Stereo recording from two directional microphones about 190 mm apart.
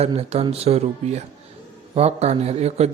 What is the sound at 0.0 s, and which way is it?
Speech, 30° right (ahead or behind).